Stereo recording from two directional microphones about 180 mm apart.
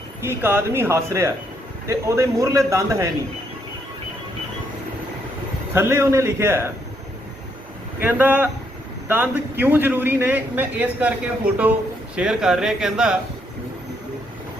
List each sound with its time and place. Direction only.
0.2 s a man's voice: 15° right (ahead or behind)
5.7 s a man's voice: 15° right (ahead or behind)
7.9 s a man's voice: 10° right (ahead or behind)